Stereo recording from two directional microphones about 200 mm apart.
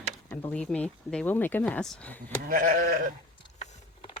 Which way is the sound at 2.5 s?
45° right (ahead or behind).